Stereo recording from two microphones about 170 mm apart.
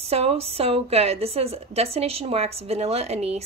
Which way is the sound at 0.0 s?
35° right (ahead or behind).